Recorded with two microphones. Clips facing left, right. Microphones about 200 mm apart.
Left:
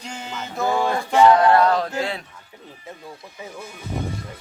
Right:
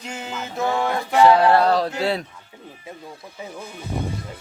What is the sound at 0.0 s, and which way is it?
Music, 5° right (ahead or behind).